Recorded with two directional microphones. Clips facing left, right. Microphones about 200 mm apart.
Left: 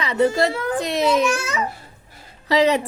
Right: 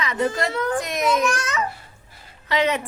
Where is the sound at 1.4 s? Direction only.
10° left (ahead or behind).